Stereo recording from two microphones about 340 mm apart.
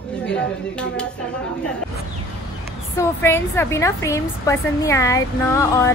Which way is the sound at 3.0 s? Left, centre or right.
Centre.